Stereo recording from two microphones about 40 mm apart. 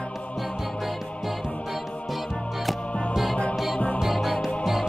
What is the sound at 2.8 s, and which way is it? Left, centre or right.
Music, left.